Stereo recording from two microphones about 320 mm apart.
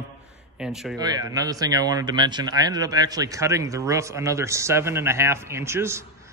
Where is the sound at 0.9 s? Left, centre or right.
Centre.